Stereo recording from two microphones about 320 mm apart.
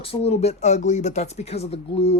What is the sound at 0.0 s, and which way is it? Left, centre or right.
Speech, centre.